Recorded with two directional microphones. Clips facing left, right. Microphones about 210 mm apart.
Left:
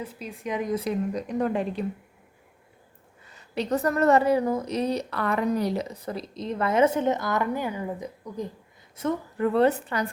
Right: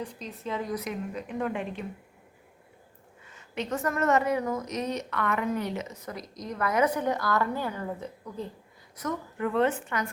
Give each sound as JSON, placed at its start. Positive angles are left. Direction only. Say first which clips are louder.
{"t": 0.0, "sound": "a woman's voice", "louder": "left 2 dB", "side_deg": 5}
{"t": 3.2, "sound": "a woman's voice", "louder": "left 5 dB", "side_deg": 35}
{"t": 9.0, "sound": "a woman's voice", "louder": "left 5 dB", "side_deg": 30}